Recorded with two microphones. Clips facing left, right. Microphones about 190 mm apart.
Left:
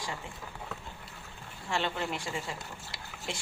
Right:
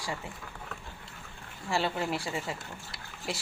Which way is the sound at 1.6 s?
5° right (ahead or behind).